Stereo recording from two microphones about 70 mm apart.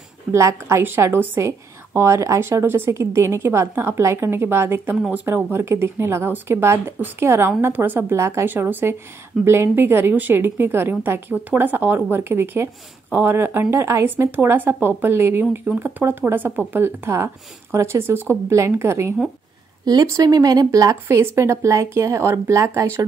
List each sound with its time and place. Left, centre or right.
0.3 s a woman's voice: right
19.8 s speech: right
20.1 s speech: right